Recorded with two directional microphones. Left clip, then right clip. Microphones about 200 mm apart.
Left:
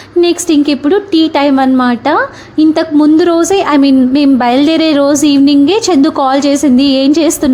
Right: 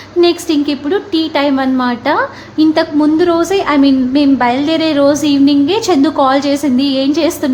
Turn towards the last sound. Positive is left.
turn(degrees=30)  # may be behind; listen again after turning